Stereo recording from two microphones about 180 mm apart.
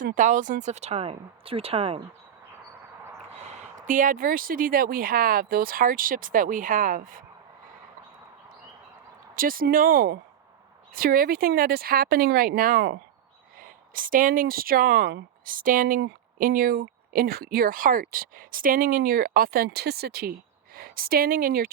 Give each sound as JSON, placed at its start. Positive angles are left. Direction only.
{"t": 0.0, "sound": "speech", "side_deg": -45}
{"t": 3.4, "sound": "speech", "side_deg": -40}
{"t": 9.3, "sound": "speech", "side_deg": -50}
{"t": 16.0, "sound": "speech", "side_deg": -60}